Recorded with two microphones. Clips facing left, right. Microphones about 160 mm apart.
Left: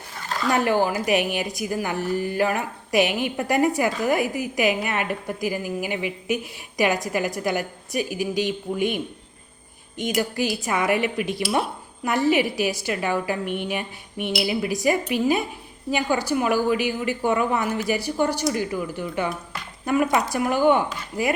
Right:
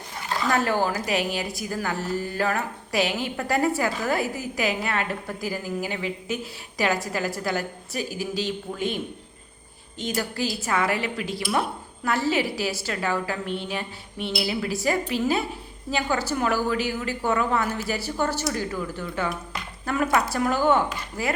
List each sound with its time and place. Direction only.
0.5 s a woman's voice: 15° left (ahead or behind)
10.2 s a woman's voice: 15° left (ahead or behind)